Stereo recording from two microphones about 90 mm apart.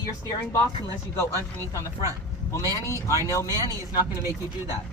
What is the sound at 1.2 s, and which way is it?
Speech, 30° left (ahead or behind).